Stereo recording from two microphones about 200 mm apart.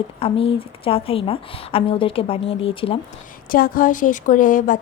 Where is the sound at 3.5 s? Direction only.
45° left (ahead or behind).